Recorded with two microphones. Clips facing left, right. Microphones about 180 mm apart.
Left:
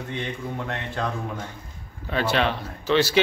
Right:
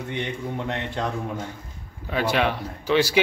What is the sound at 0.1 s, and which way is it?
A man's voice, 15° right (ahead or behind).